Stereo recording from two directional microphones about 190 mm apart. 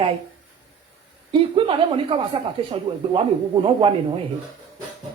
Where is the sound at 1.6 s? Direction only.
25° right (ahead or behind).